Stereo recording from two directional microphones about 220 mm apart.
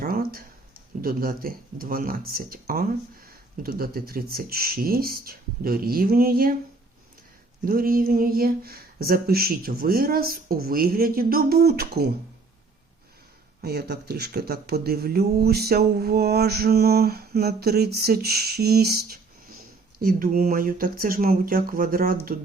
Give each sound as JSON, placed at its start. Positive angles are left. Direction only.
{"t": 0.0, "sound": "a sound", "side_deg": -40}
{"t": 1.0, "sound": "speech", "side_deg": -40}
{"t": 7.6, "sound": "speech", "side_deg": -40}
{"t": 13.6, "sound": "speech", "side_deg": -45}